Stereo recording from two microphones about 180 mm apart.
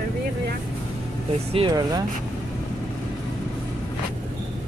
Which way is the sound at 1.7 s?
20° right (ahead or behind).